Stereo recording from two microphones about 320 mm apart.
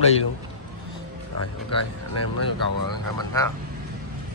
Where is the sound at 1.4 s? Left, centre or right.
Left.